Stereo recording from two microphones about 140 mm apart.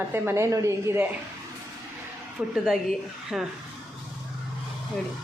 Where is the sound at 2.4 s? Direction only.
10° right (ahead or behind).